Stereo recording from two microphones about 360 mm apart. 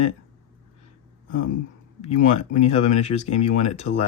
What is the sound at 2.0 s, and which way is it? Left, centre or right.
Speech, left.